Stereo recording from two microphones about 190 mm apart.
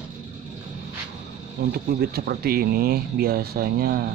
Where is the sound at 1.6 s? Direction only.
55° right (ahead or behind).